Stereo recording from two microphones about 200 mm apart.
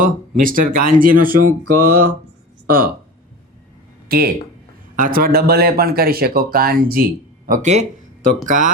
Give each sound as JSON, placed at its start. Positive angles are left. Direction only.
{"t": 0.0, "sound": "speech", "side_deg": -45}
{"t": 4.1, "sound": "speech", "side_deg": -50}